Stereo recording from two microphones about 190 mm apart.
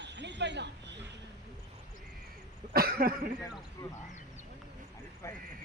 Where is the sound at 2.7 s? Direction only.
50° right (ahead or behind).